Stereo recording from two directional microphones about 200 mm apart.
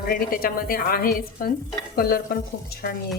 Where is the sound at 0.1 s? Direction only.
45° left (ahead or behind).